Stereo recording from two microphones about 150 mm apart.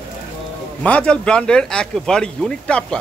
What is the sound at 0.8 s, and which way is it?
Speech, 10° left (ahead or behind).